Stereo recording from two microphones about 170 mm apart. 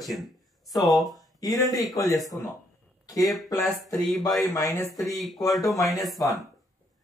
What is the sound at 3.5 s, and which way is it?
Speech, 20° left (ahead or behind).